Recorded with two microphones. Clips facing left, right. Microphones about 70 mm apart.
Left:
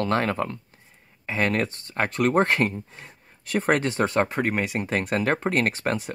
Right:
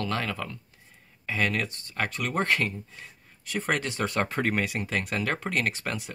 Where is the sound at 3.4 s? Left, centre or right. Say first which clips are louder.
Left 7 dB; left.